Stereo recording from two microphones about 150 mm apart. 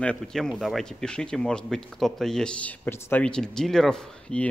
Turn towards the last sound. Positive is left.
turn(degrees=5)  # may be behind; listen again after turning